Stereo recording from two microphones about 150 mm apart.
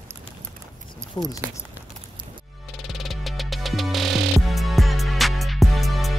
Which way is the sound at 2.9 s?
Centre (ahead or behind).